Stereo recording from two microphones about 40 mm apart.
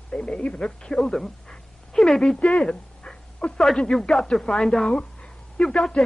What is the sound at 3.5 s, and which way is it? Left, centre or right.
Speech, centre.